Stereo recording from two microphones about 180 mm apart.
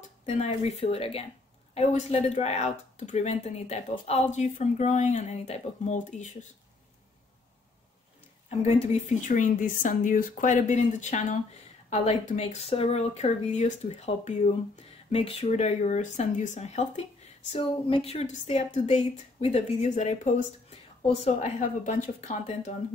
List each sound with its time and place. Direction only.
0.2 s speech: 40° left (ahead or behind)
8.5 s speech: 35° left (ahead or behind)